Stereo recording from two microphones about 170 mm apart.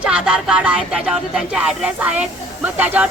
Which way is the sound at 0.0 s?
5° right (ahead or behind).